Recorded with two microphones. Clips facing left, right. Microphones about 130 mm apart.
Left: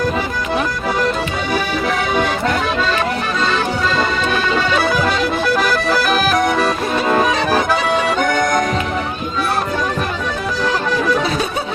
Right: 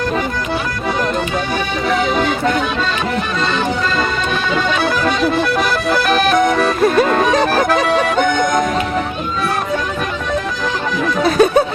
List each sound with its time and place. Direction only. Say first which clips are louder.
4.8 s accordion: right 1 dB; centre (ahead or behind)
11.2 s music: right 8 dB; 50° right (ahead or behind)